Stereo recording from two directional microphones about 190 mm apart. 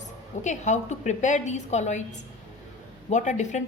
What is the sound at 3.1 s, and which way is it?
Speech, 40° left (ahead or behind).